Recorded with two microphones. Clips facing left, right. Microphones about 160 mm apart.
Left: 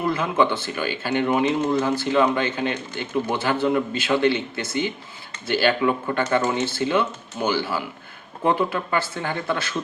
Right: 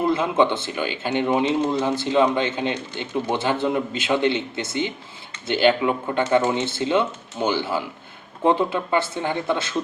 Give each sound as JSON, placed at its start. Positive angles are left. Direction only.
{"t": 0.0, "sound": "speech", "side_deg": -25}